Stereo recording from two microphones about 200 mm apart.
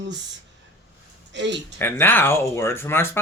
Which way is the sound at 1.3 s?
60° right (ahead or behind).